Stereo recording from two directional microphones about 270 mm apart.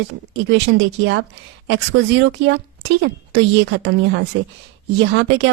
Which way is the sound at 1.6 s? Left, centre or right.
Right.